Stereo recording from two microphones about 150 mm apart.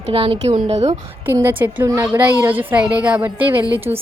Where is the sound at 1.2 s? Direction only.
15° right (ahead or behind).